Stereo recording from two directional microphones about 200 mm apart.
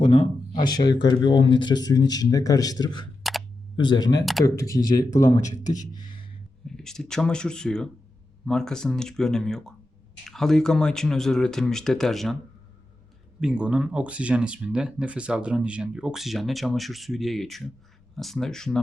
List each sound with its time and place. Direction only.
0.0 s speech: 25° left (ahead or behind)
5.4 s a man's voice: 40° left (ahead or behind)
5.9 s a sound: 20° left (ahead or behind)
6.7 s speech: centre (ahead or behind)
13.4 s speech: 5° right (ahead or behind)